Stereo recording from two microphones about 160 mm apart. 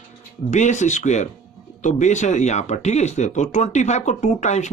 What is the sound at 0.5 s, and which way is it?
Speech, 45° left (ahead or behind).